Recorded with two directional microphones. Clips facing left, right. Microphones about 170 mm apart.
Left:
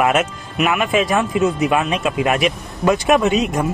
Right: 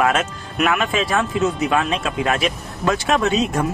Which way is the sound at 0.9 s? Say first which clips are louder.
Left 3 dB; 15° left (ahead or behind).